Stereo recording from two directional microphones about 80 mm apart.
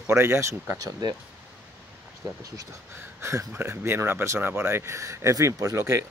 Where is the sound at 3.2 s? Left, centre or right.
Right.